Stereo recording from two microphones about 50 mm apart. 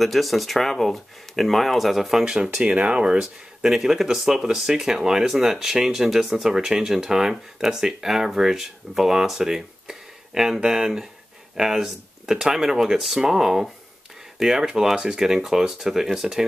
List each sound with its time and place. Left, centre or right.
0.0 s speech: centre
2.2 s speech: centre